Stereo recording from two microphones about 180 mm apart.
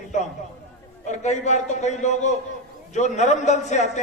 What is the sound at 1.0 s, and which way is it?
A man's voice, 40° left (ahead or behind).